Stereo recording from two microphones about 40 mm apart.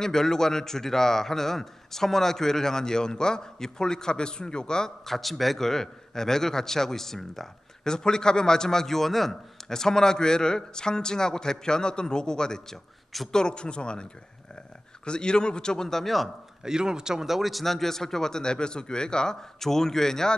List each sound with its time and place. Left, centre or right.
0.0 s a man's voice: centre
15.0 s a man's voice: left
15.9 s speech: centre
16.6 s a man's voice: centre